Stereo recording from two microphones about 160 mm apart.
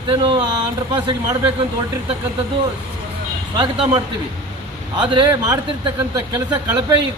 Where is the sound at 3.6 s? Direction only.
25° right (ahead or behind).